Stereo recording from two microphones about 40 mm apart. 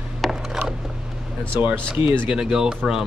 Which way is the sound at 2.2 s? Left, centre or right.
Centre.